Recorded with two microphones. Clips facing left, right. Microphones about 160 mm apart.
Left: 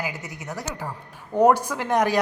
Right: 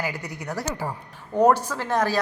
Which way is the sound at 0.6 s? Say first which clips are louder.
Right 4 dB; 5° right (ahead or behind).